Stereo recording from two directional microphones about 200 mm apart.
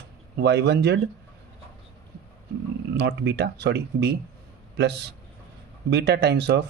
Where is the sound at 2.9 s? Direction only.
60° right (ahead or behind).